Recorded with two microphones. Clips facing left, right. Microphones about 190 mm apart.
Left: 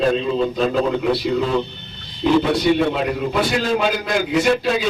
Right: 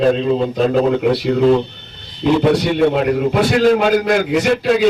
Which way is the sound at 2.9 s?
55° right (ahead or behind).